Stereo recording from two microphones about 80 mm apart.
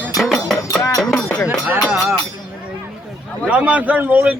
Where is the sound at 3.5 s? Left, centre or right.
Centre.